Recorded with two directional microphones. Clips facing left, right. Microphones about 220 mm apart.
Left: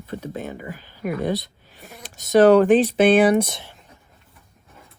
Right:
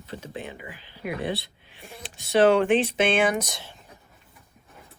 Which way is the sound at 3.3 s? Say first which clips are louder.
Left 9 dB; 25° left (ahead or behind).